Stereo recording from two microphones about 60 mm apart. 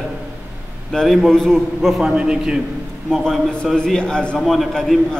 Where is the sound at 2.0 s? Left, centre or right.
Centre.